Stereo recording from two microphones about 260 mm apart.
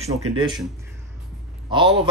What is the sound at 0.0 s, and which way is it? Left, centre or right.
Speech, right.